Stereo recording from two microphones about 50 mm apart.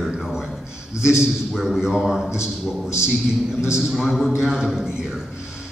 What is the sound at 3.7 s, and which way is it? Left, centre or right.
A man's voice, centre.